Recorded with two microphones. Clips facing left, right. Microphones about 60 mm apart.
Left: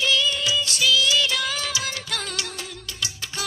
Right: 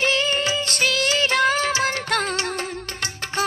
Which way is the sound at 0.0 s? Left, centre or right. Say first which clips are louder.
Right 2 dB; right.